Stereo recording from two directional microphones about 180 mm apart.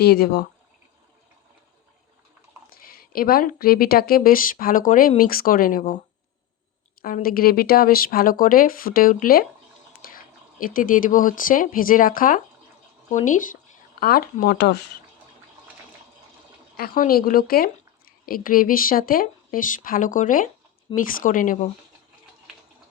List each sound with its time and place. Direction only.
0.0 s speech: 60° left (ahead or behind)
2.6 s speech: 55° left (ahead or behind)
7.0 s speech: 55° left (ahead or behind)
10.6 s speech: 50° left (ahead or behind); by 14.9 s 70° left (ahead or behind)
16.7 s a woman's voice: 55° left (ahead or behind)